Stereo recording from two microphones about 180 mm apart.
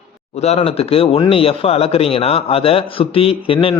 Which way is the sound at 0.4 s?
35° left (ahead or behind).